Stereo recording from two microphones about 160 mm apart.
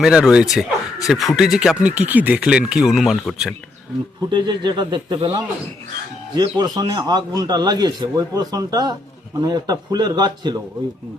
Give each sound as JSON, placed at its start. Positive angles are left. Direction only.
{"t": 0.0, "sound": "speech", "side_deg": -5}
{"t": 4.3, "sound": "a man's voice", "side_deg": -30}